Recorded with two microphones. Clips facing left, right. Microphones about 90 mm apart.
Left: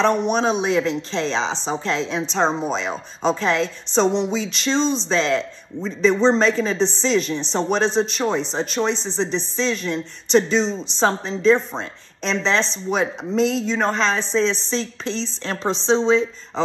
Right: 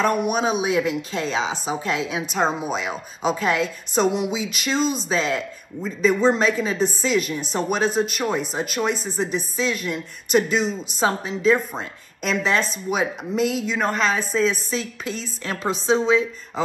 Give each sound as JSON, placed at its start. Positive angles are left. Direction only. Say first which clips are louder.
{"t": 0.0, "sound": "a woman's voice", "louder": "left 2 dB", "side_deg": -10}